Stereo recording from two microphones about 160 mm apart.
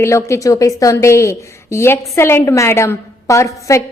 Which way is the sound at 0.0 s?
15° left (ahead or behind).